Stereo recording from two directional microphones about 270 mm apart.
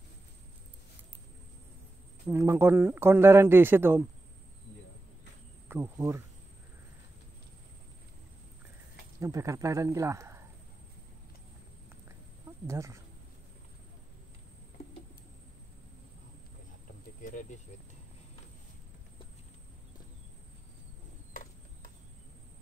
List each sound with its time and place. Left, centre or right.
2.2 s a man's voice: centre
5.7 s a man's voice: centre
9.2 s a man's voice: centre
12.6 s a man's voice: centre
17.2 s speech: left
21.3 s a sound: left